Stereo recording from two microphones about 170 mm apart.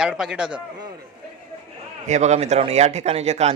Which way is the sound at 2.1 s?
45° right (ahead or behind).